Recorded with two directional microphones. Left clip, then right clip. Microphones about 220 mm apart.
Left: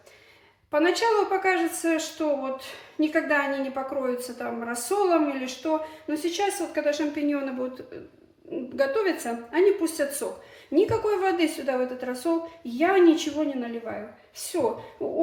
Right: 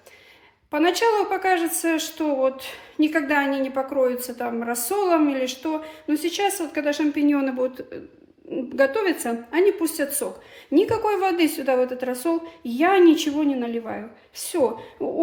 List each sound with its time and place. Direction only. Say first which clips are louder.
0.7 s a woman's voice: right 2 dB; 55° right (ahead or behind)
8.7 s a woman's voice: right 4 dB; 55° right (ahead or behind)
15.0 s a woman's voice: right 3 dB; 50° right (ahead or behind)